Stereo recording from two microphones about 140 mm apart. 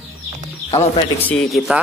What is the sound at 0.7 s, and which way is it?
Speech, 45° left (ahead or behind).